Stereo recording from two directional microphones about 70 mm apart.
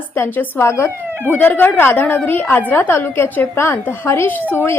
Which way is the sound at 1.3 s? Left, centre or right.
Left.